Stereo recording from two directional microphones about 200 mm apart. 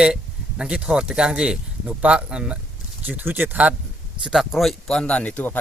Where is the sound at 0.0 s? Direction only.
5° right (ahead or behind).